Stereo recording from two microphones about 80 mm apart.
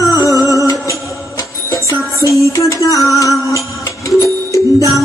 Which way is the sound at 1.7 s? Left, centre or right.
Left.